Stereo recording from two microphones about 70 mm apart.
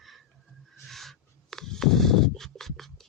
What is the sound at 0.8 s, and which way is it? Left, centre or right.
Writing, centre.